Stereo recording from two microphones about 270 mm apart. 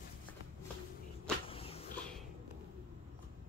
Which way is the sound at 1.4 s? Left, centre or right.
Left.